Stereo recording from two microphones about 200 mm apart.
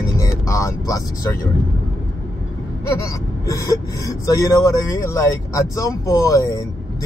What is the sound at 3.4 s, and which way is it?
Speech, 15° left (ahead or behind).